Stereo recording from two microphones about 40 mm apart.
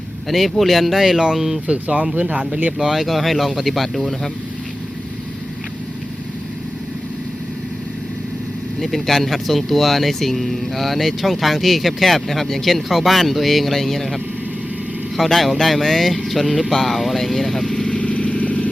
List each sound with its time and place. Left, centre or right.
0.3 s speech: centre
1.6 s speech: right
2.7 s speech: centre
8.8 s speech: centre
17.7 s vehicle: left